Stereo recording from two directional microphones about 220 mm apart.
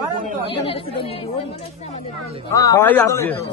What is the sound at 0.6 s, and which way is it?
Speech, 25° left (ahead or behind).